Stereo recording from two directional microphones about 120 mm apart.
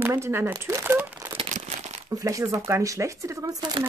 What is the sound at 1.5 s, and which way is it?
Crumpling, 70° right (ahead or behind).